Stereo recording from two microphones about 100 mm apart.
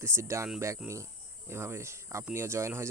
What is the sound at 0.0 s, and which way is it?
Speech, 25° right (ahead or behind).